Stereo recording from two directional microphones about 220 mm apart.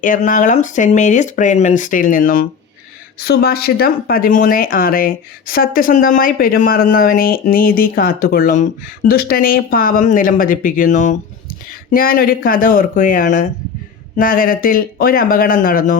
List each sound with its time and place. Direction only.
0.0 s speech: 35° left (ahead or behind)